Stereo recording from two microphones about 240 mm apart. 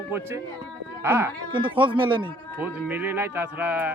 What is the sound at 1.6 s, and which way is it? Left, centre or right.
Speech, right.